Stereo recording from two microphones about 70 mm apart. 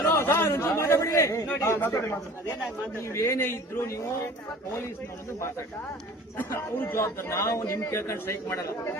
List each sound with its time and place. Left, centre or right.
0.0 s a sound: left
1.5 s a man's voice: left
6.7 s a man's voice: left